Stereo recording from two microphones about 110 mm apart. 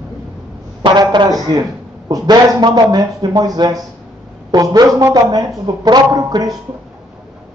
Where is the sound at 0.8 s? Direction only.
40° right (ahead or behind).